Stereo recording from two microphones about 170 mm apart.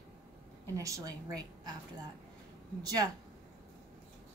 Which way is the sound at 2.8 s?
20° right (ahead or behind).